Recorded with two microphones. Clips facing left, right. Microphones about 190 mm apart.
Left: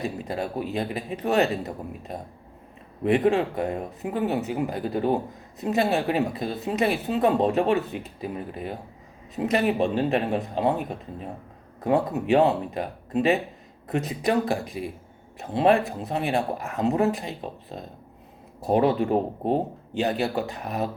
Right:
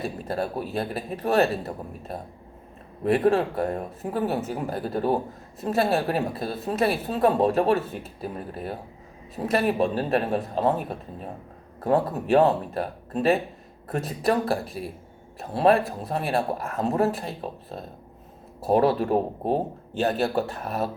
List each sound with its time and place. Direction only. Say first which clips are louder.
0.0 s speech: right 1 dB; 15° left (ahead or behind)
11.8 s speech: even; 15° left (ahead or behind)